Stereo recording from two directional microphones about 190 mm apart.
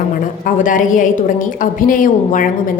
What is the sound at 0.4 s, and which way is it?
A woman's voice, 45° left (ahead or behind).